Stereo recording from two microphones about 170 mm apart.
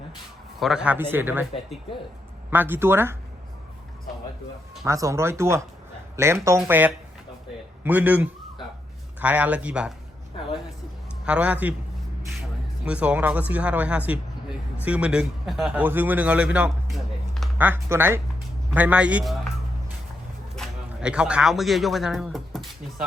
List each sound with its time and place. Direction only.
0.6 s a man's voice: 5° right (ahead or behind)
2.5 s a man's voice: 10° right (ahead or behind)
4.9 s a man's voice: 15° right (ahead or behind)
11.3 s a man's voice: 10° right (ahead or behind)
12.8 s a man's voice: 5° right (ahead or behind)
20.6 s speech: 5° right (ahead or behind)